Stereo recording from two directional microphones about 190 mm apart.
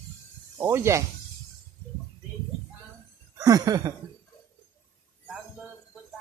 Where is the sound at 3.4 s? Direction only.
20° right (ahead or behind).